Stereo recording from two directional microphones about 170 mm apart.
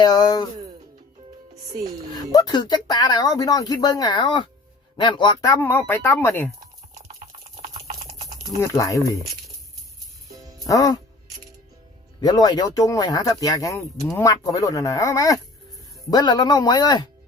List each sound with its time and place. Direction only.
0.0 s speech: 25° left (ahead or behind)
2.3 s speech: 25° left (ahead or behind)
6.9 s typing: 40° right (ahead or behind)
8.6 s speech: 20° left (ahead or behind)
10.7 s speech: 20° left (ahead or behind)
12.2 s speech: 25° left (ahead or behind)